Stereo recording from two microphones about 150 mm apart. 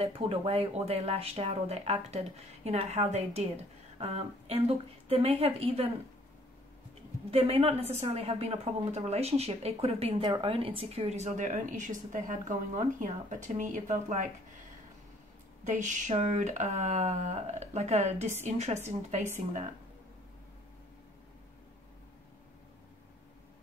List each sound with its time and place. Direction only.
0.0 s a woman's voice: 40° right (ahead or behind)
7.2 s a woman's voice: 40° right (ahead or behind)
15.6 s a woman's voice: 55° right (ahead or behind)